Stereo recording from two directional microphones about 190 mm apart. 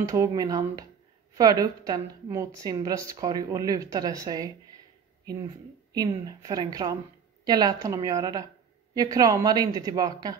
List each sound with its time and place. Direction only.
0.0 s a woman's voice: 15° right (ahead or behind)
5.9 s a woman's voice: 20° right (ahead or behind)